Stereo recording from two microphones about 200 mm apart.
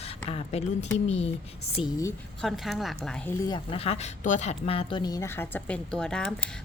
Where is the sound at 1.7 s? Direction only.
20° left (ahead or behind).